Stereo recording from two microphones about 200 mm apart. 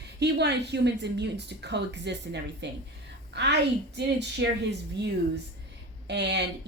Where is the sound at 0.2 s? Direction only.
55° right (ahead or behind).